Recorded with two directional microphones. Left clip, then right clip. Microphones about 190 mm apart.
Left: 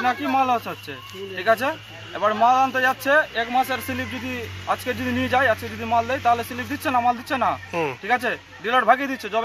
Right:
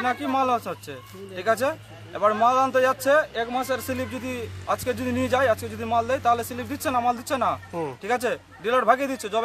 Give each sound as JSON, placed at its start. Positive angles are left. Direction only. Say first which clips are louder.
{"t": 0.0, "sound": "a man's voice", "louder": "left 3 dB", "side_deg": -30}